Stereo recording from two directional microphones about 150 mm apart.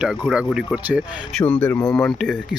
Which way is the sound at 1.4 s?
10° left (ahead or behind).